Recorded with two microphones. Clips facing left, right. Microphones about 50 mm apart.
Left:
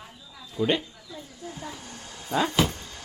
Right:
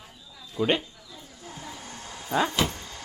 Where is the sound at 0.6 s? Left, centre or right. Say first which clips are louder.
Even; right.